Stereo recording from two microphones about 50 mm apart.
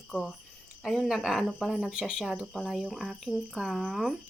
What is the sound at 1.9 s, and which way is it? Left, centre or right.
Speech, centre.